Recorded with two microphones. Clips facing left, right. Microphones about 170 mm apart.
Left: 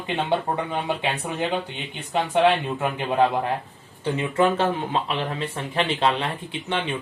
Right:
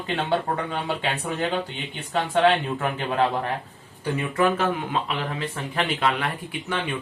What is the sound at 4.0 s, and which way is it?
Speech, 25° left (ahead or behind).